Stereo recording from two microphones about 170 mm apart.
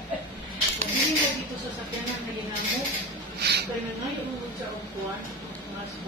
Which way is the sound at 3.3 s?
75° right (ahead or behind).